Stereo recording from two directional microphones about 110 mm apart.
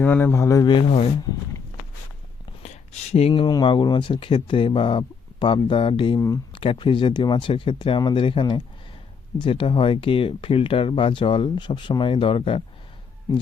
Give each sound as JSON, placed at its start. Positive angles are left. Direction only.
{"t": 0.0, "sound": "speech", "side_deg": 15}
{"t": 0.7, "sound": "speech", "side_deg": 55}
{"t": 2.6, "sound": "a sound", "side_deg": 70}
{"t": 3.4, "sound": "speech", "side_deg": 45}
{"t": 6.1, "sound": "speech", "side_deg": 30}
{"t": 6.5, "sound": "speech", "side_deg": 50}